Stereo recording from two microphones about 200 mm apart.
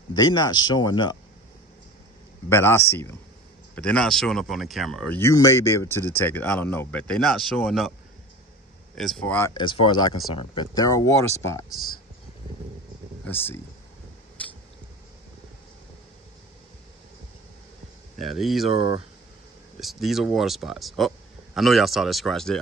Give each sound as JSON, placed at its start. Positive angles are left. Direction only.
{"t": 0.1, "sound": "speech", "side_deg": 20}
{"t": 2.5, "sound": "speech", "side_deg": 10}
{"t": 8.9, "sound": "speech", "side_deg": 0}
{"t": 9.5, "sound": "speech", "side_deg": 25}
{"t": 13.3, "sound": "speech", "side_deg": 10}
{"t": 14.4, "sound": "biting", "side_deg": 5}
{"t": 18.1, "sound": "speech", "side_deg": 0}
{"t": 18.7, "sound": "speech", "side_deg": -25}
{"t": 19.8, "sound": "speech", "side_deg": 0}